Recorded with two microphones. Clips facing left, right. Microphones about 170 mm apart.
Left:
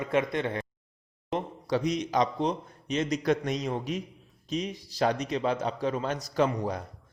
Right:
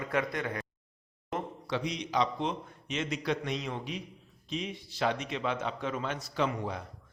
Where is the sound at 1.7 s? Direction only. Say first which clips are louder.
Left 7 dB; 45° left (ahead or behind).